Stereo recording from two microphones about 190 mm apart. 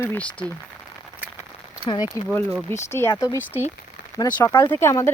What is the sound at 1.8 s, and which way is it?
Speech, 20° left (ahead or behind).